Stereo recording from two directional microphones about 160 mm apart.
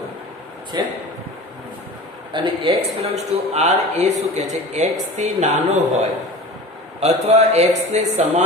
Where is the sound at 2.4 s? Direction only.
35° right (ahead or behind).